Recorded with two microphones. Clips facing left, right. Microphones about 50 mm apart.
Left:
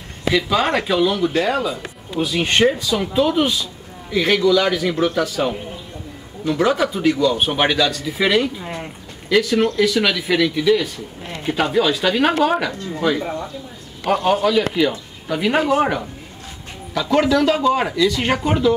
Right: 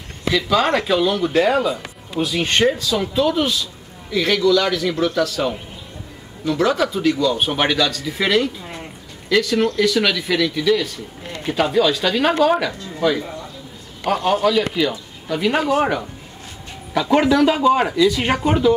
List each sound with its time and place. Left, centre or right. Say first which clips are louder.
0.3 s speech: even; centre
13.2 s speech: left 5 dB; left
14.0 s speech: left 1 dB; centre
16.9 s a man's voice: right 1 dB; centre